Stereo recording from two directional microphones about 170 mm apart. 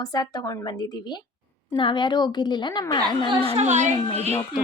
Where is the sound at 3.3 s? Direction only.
35° right (ahead or behind).